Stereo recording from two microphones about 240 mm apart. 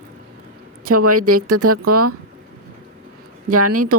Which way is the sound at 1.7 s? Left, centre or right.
Right.